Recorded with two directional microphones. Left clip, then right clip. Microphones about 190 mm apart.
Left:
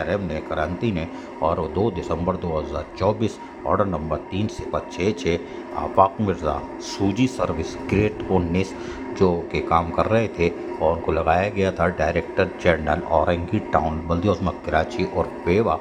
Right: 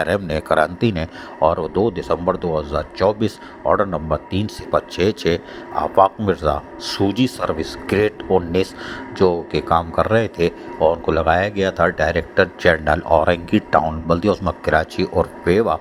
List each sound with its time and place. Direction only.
0.0 s speech: 45° right (ahead or behind); by 15.8 s 20° right (ahead or behind)